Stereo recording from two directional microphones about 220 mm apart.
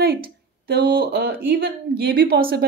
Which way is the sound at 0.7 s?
45° right (ahead or behind).